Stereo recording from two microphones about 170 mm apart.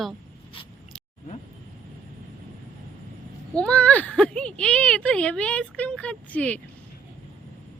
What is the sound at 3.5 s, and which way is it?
Speech, 5° left (ahead or behind).